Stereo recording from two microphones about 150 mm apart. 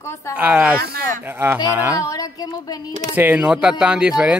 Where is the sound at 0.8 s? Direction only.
90° right.